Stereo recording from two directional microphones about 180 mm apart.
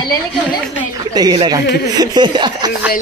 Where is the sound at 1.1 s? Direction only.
20° right (ahead or behind).